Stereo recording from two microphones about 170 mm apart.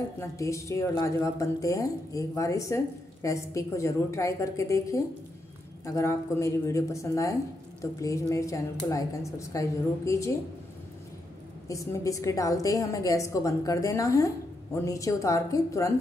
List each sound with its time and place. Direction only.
0.2 s speech: 15° left (ahead or behind)
11.6 s speech: 20° left (ahead or behind)